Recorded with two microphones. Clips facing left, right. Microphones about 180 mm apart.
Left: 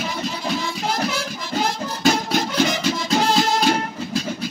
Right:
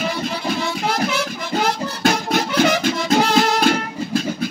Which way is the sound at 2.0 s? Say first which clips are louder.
Right 1 dB; 55° right (ahead or behind).